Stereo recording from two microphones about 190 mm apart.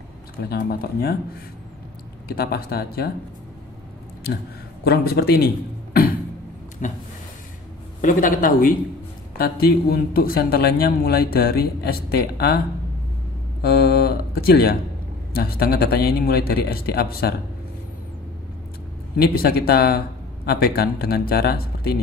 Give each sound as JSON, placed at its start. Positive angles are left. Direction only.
{"t": 0.4, "sound": "a man's voice", "side_deg": 55}
{"t": 2.2, "sound": "a man's voice", "side_deg": 55}
{"t": 4.8, "sound": "speech", "side_deg": 55}
{"t": 6.8, "sound": "a sound", "side_deg": 40}
{"t": 8.0, "sound": "a man's voice", "side_deg": 45}
{"t": 13.6, "sound": "a man's voice", "side_deg": 55}
{"t": 19.3, "sound": "a man's voice", "side_deg": 55}